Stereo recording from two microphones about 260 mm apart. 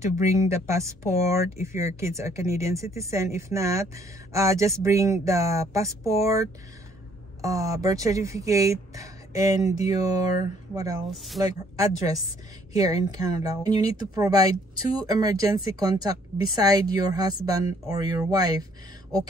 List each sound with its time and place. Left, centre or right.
0.0 s speech: centre